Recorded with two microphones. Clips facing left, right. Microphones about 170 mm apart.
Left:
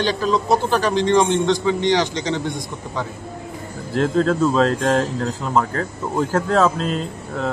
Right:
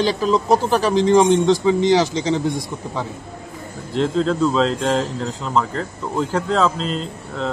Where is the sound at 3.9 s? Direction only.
5° left (ahead or behind).